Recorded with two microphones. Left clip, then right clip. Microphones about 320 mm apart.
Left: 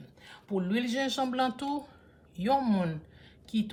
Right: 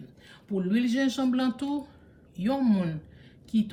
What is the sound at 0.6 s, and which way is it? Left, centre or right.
Speech, centre.